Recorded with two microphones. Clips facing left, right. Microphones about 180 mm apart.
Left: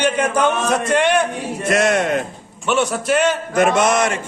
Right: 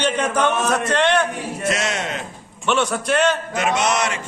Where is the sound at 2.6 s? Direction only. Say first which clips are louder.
Left 2 dB; 10° left (ahead or behind).